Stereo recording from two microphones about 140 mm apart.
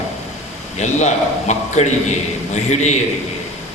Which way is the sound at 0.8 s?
55° left (ahead or behind).